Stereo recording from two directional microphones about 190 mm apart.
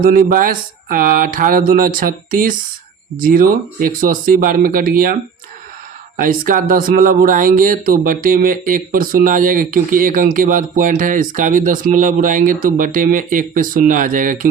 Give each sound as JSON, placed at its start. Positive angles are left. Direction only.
{"t": 0.0, "sound": "speech", "side_deg": -50}
{"t": 6.1, "sound": "speech", "side_deg": -45}